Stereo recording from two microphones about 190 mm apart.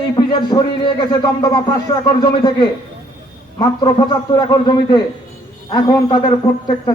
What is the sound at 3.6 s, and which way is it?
A man's voice, 20° left (ahead or behind).